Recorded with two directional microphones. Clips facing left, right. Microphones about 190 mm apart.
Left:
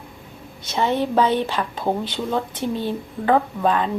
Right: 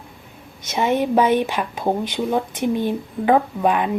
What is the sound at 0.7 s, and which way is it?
A woman's voice, 15° right (ahead or behind).